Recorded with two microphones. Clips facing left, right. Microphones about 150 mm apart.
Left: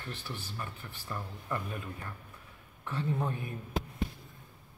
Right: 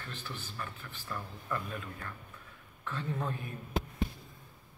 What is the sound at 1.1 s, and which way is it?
A woman's voice, 20° left (ahead or behind).